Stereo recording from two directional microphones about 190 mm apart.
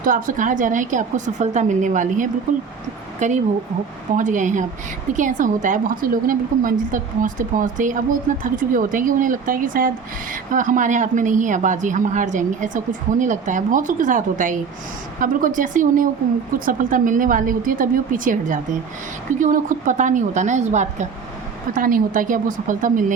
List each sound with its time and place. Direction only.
0.0 s a woman's voice: 45° right (ahead or behind)